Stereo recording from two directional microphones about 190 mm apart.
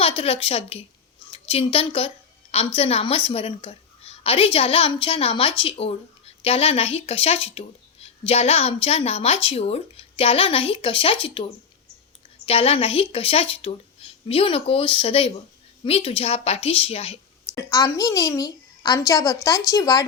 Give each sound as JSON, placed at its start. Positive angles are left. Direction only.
{"t": 0.2, "sound": "a woman's voice", "side_deg": 30}
{"t": 12.5, "sound": "a woman's voice", "side_deg": 30}
{"t": 17.5, "sound": "a child's voice", "side_deg": 15}